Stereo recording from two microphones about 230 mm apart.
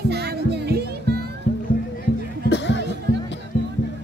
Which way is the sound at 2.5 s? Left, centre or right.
Left.